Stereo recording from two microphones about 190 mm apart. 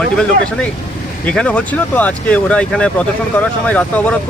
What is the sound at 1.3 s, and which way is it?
Speech, 5° left (ahead or behind).